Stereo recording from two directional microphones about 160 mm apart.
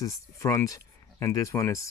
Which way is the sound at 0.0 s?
20° left (ahead or behind).